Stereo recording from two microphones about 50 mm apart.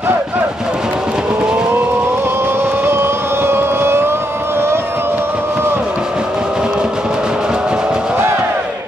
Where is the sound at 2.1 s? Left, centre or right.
Right.